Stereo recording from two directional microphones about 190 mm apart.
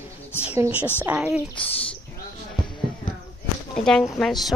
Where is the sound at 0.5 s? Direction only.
10° right (ahead or behind).